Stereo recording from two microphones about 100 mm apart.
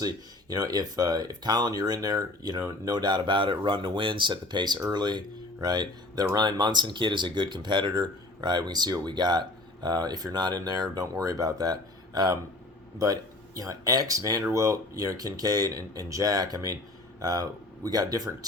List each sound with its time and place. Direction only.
0.0 s speech: 40° right (ahead or behind)
13.6 s speech: 35° right (ahead or behind)